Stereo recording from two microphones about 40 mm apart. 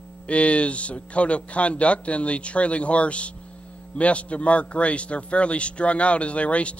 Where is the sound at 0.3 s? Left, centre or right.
Left.